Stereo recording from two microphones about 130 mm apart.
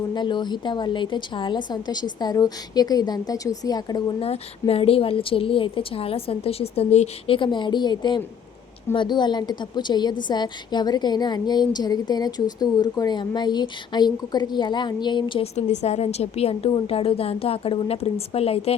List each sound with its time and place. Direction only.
0.1 s a woman's voice: 35° left (ahead or behind)
4.2 s a woman's voice: 50° left (ahead or behind)
7.3 s a woman's voice: 35° left (ahead or behind)
15.5 s a woman's voice: 60° left (ahead or behind)